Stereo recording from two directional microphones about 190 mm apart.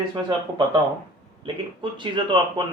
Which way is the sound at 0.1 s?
25° right (ahead or behind).